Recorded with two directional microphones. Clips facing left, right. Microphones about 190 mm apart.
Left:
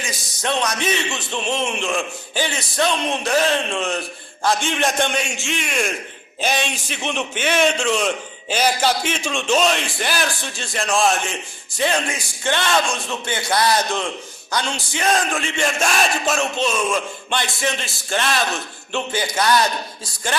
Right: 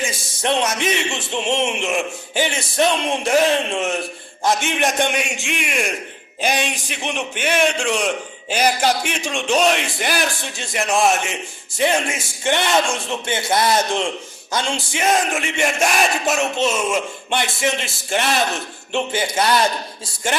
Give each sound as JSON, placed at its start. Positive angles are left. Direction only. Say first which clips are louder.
{"t": 0.0, "sound": "a man's voice", "louder": "right 3 dB", "side_deg": -25}